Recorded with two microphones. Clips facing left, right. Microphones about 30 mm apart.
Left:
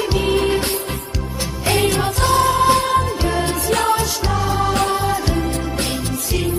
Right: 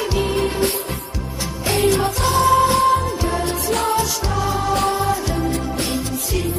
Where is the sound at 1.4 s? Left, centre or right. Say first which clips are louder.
Left 2 dB; left.